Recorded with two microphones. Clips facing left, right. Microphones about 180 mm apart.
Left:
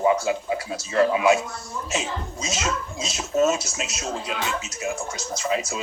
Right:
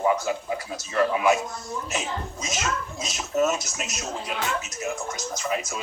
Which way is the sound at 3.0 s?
30° left (ahead or behind).